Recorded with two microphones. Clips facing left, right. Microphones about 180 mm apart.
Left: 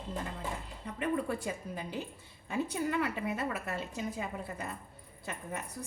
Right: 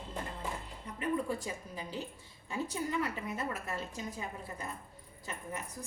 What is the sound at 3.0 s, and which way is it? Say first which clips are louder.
Speech: left 3 dB; 65° left (ahead or behind).